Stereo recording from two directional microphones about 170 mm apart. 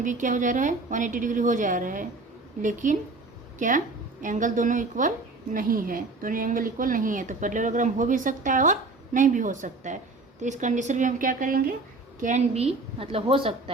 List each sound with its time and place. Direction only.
0.0 s speech: 50° right (ahead or behind)
12.2 s a woman's voice: 40° right (ahead or behind)